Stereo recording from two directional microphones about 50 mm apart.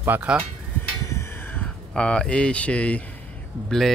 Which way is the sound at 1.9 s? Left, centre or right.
Centre.